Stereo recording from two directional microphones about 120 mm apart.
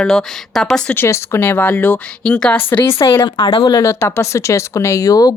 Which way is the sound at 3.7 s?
25° left (ahead or behind).